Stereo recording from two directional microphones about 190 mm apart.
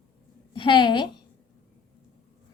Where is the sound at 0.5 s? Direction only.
25° left (ahead or behind).